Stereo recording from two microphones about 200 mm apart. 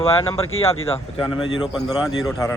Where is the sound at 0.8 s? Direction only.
25° left (ahead or behind).